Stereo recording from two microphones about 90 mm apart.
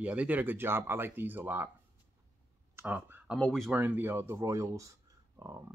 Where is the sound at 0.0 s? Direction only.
15° right (ahead or behind).